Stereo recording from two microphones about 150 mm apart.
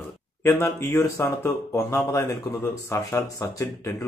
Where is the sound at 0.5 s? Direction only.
15° left (ahead or behind).